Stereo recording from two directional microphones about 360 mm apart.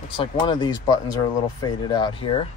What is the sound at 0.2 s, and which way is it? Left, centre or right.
Speech, centre.